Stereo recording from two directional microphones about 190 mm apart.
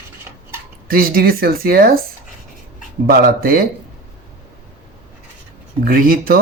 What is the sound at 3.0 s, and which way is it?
Speech, 50° right (ahead or behind).